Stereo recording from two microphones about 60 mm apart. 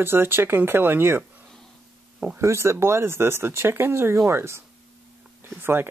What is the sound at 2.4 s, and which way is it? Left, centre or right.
Speech, right.